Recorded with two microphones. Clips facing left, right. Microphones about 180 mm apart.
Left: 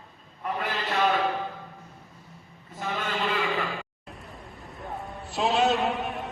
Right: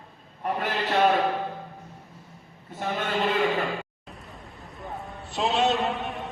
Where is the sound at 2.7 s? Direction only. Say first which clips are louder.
Right 3 dB; 40° right (ahead or behind).